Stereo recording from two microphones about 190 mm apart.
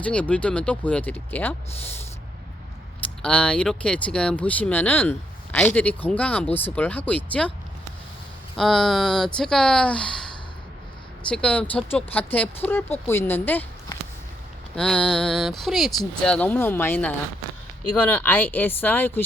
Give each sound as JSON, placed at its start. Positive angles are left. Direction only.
{"t": 0.0, "sound": "speech", "side_deg": 5}
{"t": 3.2, "sound": "speech", "side_deg": 5}
{"t": 8.5, "sound": "speech", "side_deg": 0}
{"t": 11.3, "sound": "speech", "side_deg": 5}